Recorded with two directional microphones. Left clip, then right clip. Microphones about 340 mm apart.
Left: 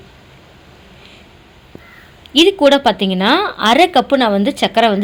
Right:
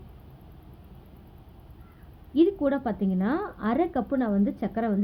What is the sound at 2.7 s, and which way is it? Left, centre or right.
A woman's voice, centre.